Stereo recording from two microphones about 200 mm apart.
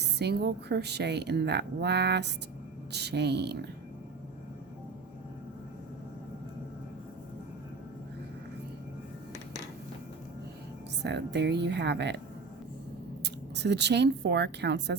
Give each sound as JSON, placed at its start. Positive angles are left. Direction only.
{"t": 0.2, "sound": "a woman's voice", "side_deg": -55}
{"t": 11.0, "sound": "a woman's voice", "side_deg": -60}
{"t": 13.2, "sound": "a woman's voice", "side_deg": -60}